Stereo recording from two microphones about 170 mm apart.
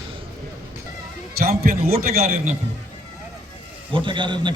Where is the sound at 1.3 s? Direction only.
60° right (ahead or behind).